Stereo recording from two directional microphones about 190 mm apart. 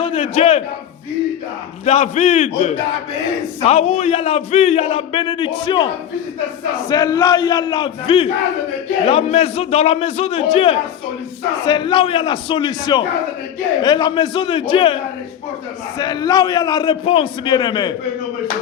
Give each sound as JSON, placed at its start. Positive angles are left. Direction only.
{"t": 0.0, "sound": "a man's voice", "side_deg": 30}
{"t": 1.8, "sound": "a man's voice", "side_deg": 35}
{"t": 16.0, "sound": "a man's voice", "side_deg": 20}